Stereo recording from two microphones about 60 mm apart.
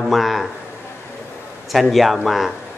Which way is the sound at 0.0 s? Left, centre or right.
Centre.